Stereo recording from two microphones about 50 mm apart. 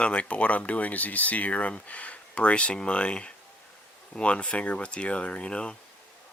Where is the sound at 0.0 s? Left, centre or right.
Left.